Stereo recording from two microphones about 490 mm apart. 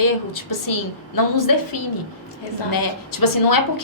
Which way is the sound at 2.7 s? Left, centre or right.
Left.